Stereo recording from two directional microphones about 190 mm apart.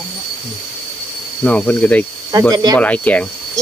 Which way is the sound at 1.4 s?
5° left (ahead or behind).